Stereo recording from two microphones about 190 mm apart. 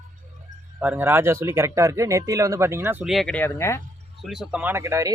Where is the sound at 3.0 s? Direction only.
Centre (ahead or behind).